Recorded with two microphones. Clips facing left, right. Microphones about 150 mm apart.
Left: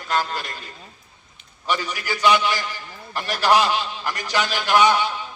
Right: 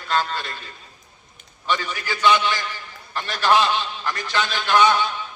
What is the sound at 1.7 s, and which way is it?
A man's voice, 15° left (ahead or behind).